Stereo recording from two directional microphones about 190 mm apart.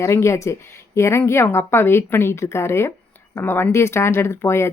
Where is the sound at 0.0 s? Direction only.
15° left (ahead or behind).